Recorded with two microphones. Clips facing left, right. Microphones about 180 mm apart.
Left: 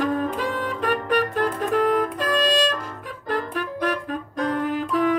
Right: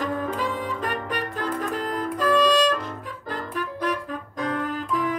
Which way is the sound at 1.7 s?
65° left (ahead or behind).